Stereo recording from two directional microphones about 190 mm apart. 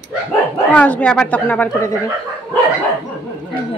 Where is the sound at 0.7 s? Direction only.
5° left (ahead or behind).